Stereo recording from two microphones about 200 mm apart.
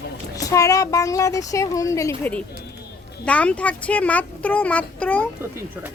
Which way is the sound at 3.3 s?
5° left (ahead or behind).